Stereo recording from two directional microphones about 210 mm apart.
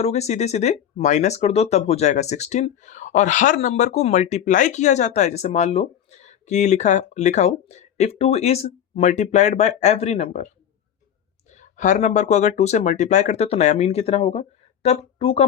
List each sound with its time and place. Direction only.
0.0 s speech: 30° left (ahead or behind)
11.5 s speech: 35° left (ahead or behind)